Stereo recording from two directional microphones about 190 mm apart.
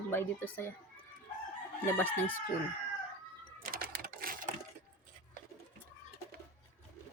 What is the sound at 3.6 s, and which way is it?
Sewing machine, 50° right (ahead or behind).